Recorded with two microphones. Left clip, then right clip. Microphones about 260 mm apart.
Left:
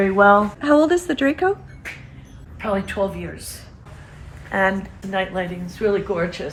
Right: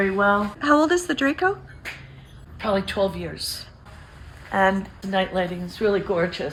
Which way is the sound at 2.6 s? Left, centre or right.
Right.